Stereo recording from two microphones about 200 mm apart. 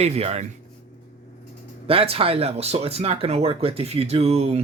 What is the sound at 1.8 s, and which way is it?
Speech, 30° right (ahead or behind).